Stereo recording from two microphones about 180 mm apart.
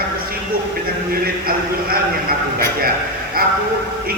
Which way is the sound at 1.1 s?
55° right (ahead or behind).